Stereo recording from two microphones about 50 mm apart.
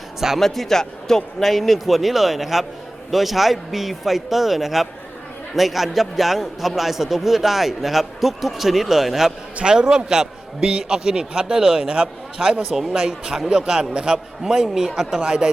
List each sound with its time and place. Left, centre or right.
0.3 s a man's voice: centre
9.6 s a man's voice: centre